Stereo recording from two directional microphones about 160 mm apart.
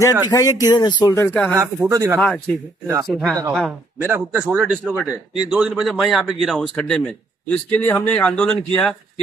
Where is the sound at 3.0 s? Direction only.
Centre (ahead or behind).